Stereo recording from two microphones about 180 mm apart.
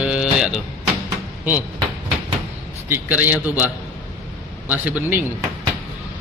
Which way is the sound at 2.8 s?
10° right (ahead or behind).